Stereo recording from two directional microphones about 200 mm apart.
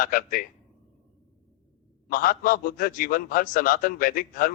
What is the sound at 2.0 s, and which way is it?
A man's voice, 45° left (ahead or behind).